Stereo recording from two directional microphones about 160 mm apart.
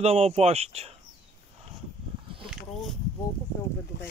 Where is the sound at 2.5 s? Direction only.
Centre (ahead or behind).